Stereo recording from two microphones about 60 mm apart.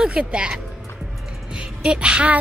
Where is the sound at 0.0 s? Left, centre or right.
Centre.